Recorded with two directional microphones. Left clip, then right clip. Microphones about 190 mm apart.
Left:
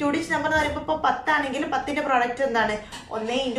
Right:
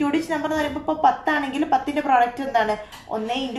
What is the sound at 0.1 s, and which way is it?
A woman's voice, 45° right (ahead or behind).